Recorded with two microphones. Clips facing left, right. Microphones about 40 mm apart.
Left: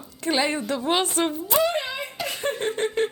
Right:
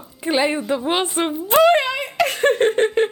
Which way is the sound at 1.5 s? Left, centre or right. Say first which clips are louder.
Right 10 dB; right.